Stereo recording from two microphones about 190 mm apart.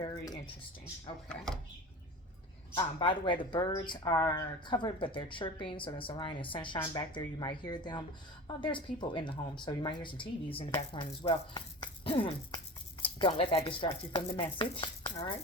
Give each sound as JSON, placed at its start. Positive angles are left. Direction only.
{"t": 0.0, "sound": "a sound", "side_deg": 25}
{"t": 1.3, "sound": "speech", "side_deg": 5}
{"t": 2.7, "sound": "speech", "side_deg": 25}